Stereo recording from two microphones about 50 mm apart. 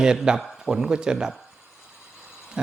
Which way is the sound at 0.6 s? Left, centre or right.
Centre.